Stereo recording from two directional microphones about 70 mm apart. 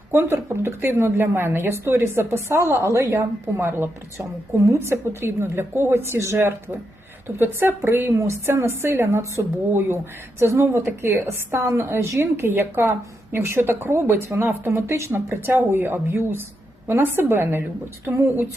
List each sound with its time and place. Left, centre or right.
0.1 s a woman's voice: right
8.2 s a woman's voice: right